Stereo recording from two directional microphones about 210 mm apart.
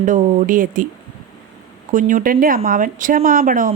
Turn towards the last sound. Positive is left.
turn(degrees=-40)  # may be behind; listen again after turning